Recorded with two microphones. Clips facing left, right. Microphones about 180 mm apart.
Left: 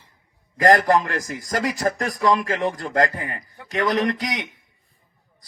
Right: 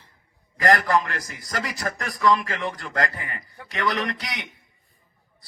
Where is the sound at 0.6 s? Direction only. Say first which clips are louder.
Left 4 dB; 45° left (ahead or behind).